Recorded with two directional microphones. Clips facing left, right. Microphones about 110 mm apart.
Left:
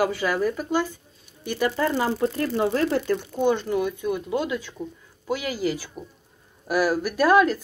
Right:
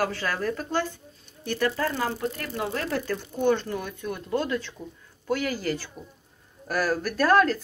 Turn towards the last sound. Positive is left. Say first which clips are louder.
# left 2 dB
turn(degrees=10)  # may be behind; listen again after turning